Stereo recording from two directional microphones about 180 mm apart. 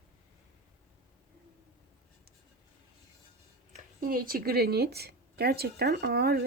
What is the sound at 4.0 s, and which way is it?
Speech, 55° right (ahead or behind).